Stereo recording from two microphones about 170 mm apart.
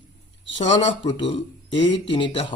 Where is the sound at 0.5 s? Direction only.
40° left (ahead or behind).